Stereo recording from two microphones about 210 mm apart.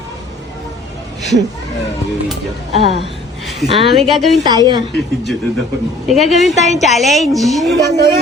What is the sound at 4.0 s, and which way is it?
Speech, centre (ahead or behind).